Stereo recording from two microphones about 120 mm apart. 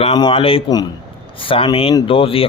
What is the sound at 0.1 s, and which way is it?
Speech, 45° left (ahead or behind).